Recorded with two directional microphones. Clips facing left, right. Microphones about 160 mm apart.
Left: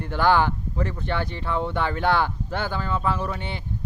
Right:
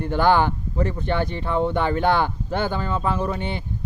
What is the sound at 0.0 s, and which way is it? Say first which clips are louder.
Speech: right 2 dB; 15° right (ahead or behind).